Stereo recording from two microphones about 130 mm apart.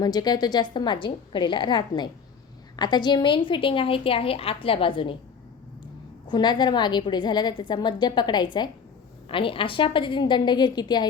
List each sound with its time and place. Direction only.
0.0 s a woman's voice: 30° left (ahead or behind)
6.2 s a woman's voice: 35° left (ahead or behind)